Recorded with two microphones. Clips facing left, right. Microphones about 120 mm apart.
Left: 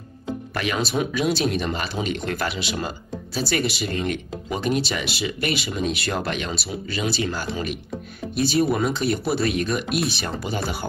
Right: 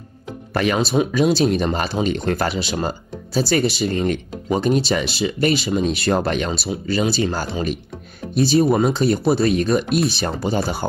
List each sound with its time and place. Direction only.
0.5 s speech: 40° right (ahead or behind)